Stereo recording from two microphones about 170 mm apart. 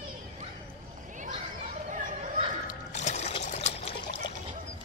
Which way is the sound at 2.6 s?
45° left (ahead or behind).